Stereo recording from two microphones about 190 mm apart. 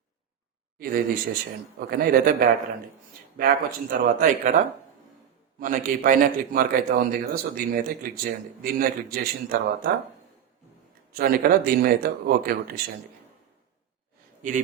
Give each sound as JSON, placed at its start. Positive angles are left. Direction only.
{"t": 0.8, "sound": "a man's voice", "side_deg": -50}
{"t": 11.1, "sound": "a man's voice", "side_deg": -50}